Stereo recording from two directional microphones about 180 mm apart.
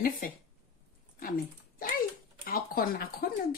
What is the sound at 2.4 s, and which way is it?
Speech, 55° left (ahead or behind).